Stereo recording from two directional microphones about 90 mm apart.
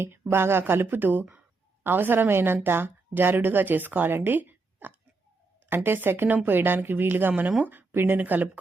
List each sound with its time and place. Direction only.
0.0 s speech: 25° right (ahead or behind)